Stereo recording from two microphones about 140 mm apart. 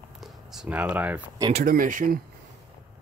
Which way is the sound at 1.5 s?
70° right (ahead or behind).